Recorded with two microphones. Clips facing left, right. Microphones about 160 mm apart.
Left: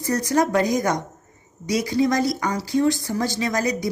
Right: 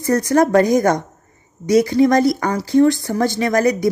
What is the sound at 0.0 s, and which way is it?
A woman's voice, 55° right (ahead or behind).